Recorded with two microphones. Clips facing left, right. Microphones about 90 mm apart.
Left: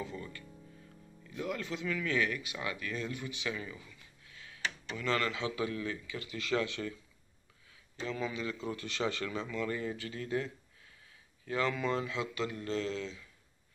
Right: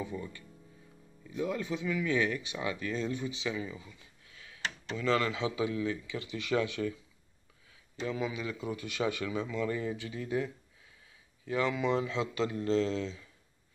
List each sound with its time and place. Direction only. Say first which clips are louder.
0.0 s a man's voice: right 3 dB; 15° right (ahead or behind)
8.0 s a man's voice: right 2 dB; 15° right (ahead or behind)
12.1 s speech: right 4 dB; 30° right (ahead or behind)